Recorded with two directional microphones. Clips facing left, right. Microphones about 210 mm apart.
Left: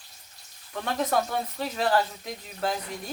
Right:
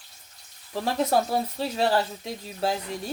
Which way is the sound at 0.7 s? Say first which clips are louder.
Right 3 dB; 30° right (ahead or behind).